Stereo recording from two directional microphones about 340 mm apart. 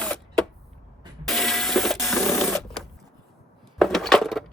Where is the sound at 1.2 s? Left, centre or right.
Centre.